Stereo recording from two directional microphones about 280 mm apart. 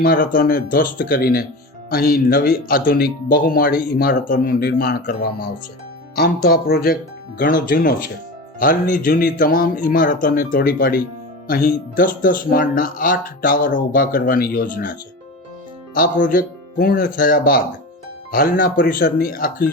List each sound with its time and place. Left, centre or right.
0.0 s speech: left
16.0 s speech: left